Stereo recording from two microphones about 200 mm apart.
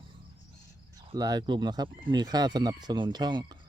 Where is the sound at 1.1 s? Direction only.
20° right (ahead or behind).